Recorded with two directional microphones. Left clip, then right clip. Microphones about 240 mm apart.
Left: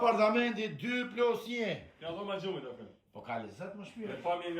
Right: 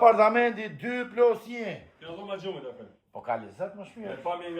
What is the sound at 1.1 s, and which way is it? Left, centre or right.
Speech, right.